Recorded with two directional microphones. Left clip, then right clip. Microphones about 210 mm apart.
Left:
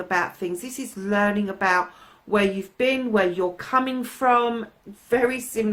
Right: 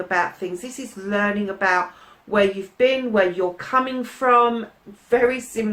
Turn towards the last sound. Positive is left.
turn(degrees=45)  # may be behind; listen again after turning